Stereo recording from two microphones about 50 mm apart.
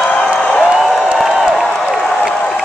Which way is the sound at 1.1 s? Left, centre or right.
Centre.